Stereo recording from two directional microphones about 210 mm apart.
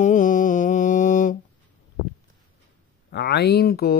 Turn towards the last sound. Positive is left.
turn(degrees=50)  # may be behind; listen again after turning